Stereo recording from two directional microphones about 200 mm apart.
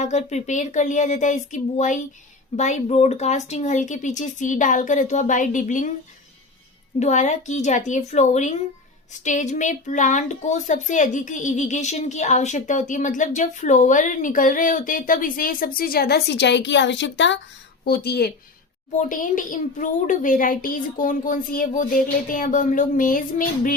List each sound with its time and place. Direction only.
0.0 s a woman's voice: 35° left (ahead or behind)
7.0 s a woman's voice: 35° left (ahead or behind); by 17.4 s 65° left (ahead or behind)
17.8 s speech: 50° left (ahead or behind)
18.9 s a woman's voice: 40° left (ahead or behind)